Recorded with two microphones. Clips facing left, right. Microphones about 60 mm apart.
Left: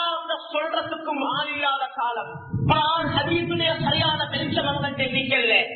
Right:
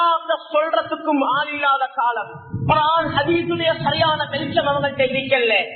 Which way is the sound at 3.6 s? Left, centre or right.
Right.